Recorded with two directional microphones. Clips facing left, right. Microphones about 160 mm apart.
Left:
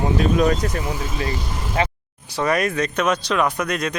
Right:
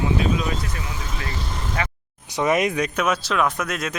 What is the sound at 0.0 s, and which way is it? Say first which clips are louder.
Speech: left 4 dB; 45° left (ahead or behind).